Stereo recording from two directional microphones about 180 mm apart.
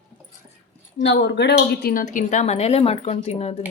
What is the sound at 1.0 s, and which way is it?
A woman's voice, 75° left (ahead or behind).